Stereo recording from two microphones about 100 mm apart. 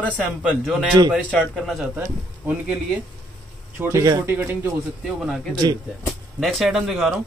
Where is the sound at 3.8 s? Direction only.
30° right (ahead or behind).